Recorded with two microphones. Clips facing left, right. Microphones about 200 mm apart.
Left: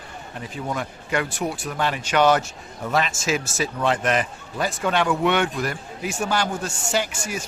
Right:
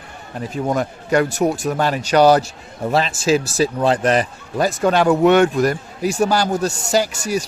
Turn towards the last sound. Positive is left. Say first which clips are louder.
# right 7 dB
turn(degrees=-40)  # may be behind; listen again after turning